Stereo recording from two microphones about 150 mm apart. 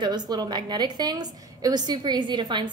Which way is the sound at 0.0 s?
30° right (ahead or behind).